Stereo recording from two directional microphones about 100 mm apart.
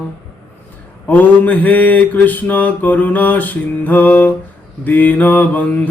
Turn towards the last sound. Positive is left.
turn(degrees=15)  # may be behind; listen again after turning